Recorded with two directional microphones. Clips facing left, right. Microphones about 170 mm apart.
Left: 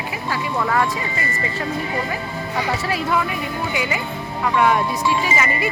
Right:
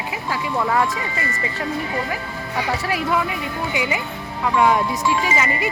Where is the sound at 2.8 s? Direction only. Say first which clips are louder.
Even; 15° right (ahead or behind).